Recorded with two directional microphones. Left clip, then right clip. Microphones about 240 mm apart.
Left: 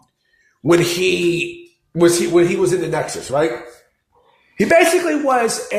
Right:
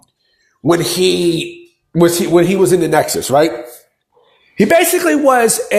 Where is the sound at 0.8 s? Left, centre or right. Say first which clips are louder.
Right 3 dB; centre; by 3.5 s right.